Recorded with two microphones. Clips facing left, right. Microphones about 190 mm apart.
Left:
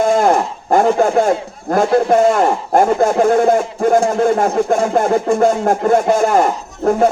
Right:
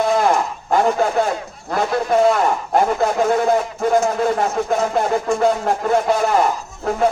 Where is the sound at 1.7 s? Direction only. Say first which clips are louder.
Left 6 dB; 45° left (ahead or behind).